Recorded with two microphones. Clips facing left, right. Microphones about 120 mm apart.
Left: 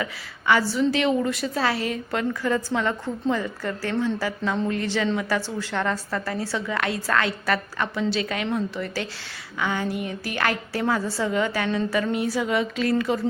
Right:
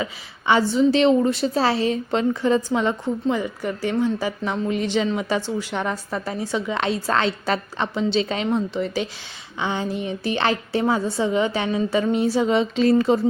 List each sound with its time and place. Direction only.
0.0 s a woman's voice: 20° right (ahead or behind)